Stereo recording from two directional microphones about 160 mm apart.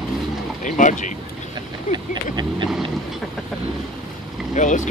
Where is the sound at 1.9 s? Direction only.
25° right (ahead or behind).